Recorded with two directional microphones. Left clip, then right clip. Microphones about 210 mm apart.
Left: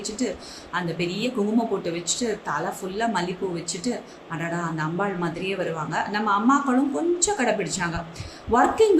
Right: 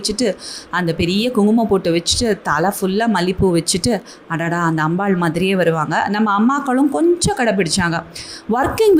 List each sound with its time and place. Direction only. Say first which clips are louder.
0.0 s speech: right 10 dB; 45° right (ahead or behind)